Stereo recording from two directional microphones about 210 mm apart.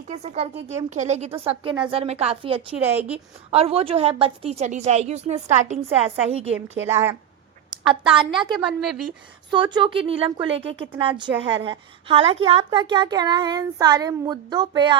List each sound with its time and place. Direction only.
0.1 s a woman's voice: 30° right (ahead or behind)
2.8 s speech: 10° right (ahead or behind)
3.5 s a woman's voice: 30° right (ahead or behind)
6.8 s speech: 10° right (ahead or behind)
7.7 s a woman's voice: 25° right (ahead or behind)
8.5 s a woman's voice: centre (ahead or behind)
9.5 s a woman's voice: 20° right (ahead or behind)